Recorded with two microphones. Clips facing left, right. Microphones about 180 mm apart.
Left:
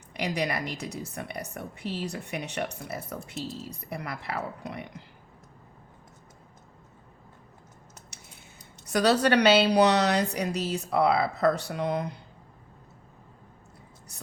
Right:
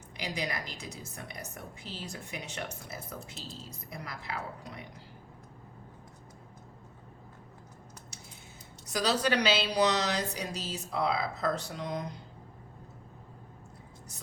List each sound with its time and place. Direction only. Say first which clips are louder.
0.1 s a woman's voice: left 7 dB; 65° left (ahead or behind)
8.9 s speech: left 6 dB; 65° left (ahead or behind)